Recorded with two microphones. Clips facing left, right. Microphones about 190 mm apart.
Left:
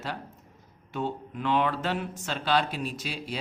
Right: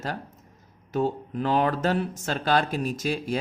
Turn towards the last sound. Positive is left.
turn(degrees=-45)  # may be behind; listen again after turning